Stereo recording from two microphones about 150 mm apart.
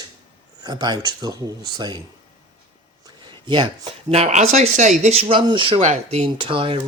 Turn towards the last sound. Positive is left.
turn(degrees=-35)  # may be behind; listen again after turning